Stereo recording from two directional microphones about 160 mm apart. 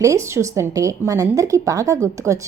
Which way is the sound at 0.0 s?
20° right (ahead or behind).